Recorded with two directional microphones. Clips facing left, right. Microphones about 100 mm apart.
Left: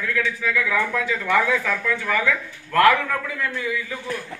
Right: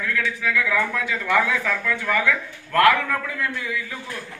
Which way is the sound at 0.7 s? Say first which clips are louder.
Left 1 dB; 5° left (ahead or behind).